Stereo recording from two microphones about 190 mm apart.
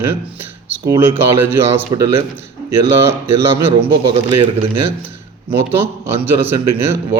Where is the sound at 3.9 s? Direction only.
25° right (ahead or behind).